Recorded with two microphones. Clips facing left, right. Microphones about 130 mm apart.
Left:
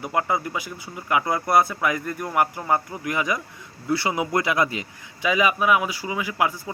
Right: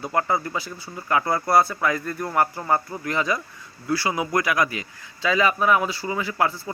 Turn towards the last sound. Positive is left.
turn(degrees=15)  # may be behind; listen again after turning